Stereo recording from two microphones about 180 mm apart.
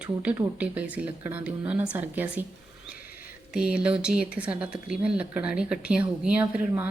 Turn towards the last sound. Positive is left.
turn(degrees=-10)  # may be behind; listen again after turning